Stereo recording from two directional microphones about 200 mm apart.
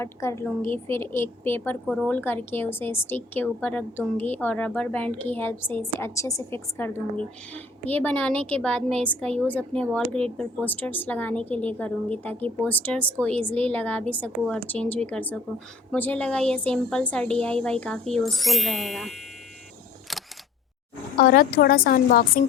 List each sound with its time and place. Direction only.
0.0 s a woman's voice: 15° left (ahead or behind)
21.2 s a woman's voice: 45° left (ahead or behind)